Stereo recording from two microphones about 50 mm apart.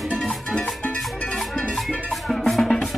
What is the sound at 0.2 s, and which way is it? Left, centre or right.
Music, centre.